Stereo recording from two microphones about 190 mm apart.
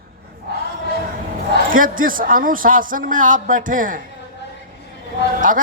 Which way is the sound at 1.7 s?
45° right (ahead or behind).